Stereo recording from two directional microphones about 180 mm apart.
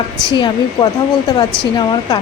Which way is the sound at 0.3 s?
25° left (ahead or behind).